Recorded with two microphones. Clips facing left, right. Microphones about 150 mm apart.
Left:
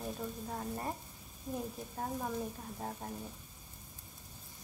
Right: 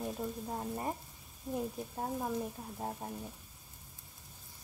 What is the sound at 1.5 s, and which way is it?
Speech, 5° right (ahead or behind).